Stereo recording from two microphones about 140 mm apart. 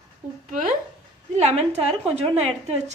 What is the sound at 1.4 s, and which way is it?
A woman's voice, 50° right (ahead or behind).